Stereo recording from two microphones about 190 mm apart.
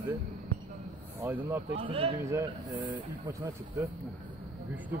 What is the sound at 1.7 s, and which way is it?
Speech, 30° right (ahead or behind).